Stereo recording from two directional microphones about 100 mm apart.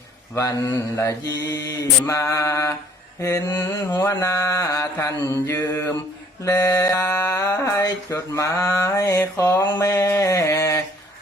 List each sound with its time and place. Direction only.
0.3 s mantra: 30° left (ahead or behind)
3.5 s mantra: 40° left (ahead or behind)
9.7 s a sound: 25° left (ahead or behind)